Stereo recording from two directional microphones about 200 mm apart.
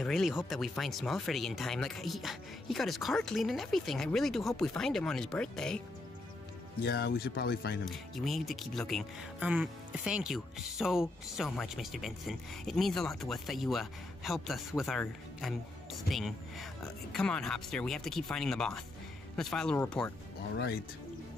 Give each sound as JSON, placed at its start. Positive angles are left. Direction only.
{"t": 0.0, "sound": "speech", "side_deg": 0}
{"t": 6.8, "sound": "speech", "side_deg": 55}
{"t": 7.8, "sound": "speech", "side_deg": 0}